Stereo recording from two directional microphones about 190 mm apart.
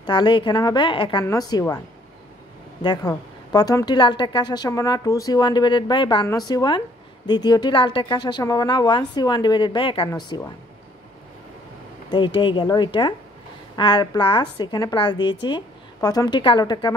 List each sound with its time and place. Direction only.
0.0 s a woman's voice: 25° left (ahead or behind)
2.8 s a woman's voice: 20° left (ahead or behind)
12.4 s a woman's voice: 25° left (ahead or behind)